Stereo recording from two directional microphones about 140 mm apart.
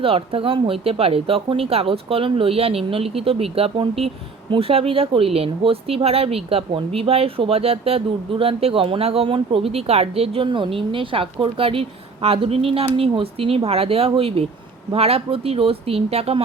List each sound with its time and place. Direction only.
0.0 s speech: 40° right (ahead or behind)